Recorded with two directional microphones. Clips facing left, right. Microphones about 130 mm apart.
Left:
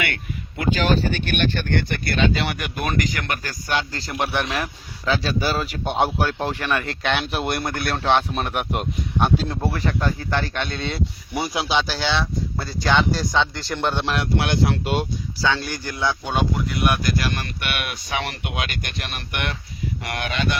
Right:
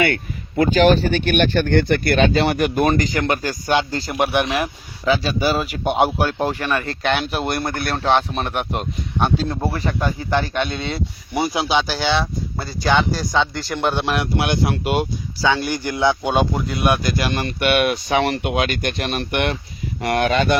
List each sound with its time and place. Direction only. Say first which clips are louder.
0.0 s speech: right 8 dB; 35° right (ahead or behind); by 9.6 s 5° left (ahead or behind)
9.7 s speech: right 1 dB; 5° right (ahead or behind); by 19.5 s 30° right (ahead or behind)
20.0 s speech: right 10 dB; 40° right (ahead or behind)